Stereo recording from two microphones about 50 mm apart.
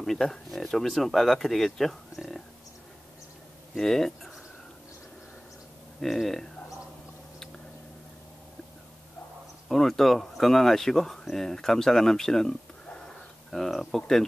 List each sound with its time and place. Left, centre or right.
0.0 s speech: centre
3.7 s speech: centre
5.9 s speech: centre
9.7 s speech: centre
12.8 s a sound: centre
13.5 s speech: centre